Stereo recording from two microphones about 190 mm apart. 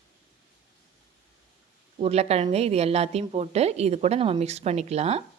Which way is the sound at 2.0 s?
35° right (ahead or behind).